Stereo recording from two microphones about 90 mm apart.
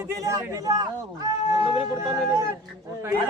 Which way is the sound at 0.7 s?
50° right (ahead or behind).